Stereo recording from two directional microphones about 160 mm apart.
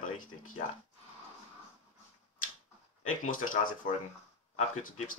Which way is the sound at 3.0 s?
55° left (ahead or behind).